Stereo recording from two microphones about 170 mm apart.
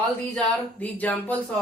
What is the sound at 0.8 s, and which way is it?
Speech, 10° left (ahead or behind).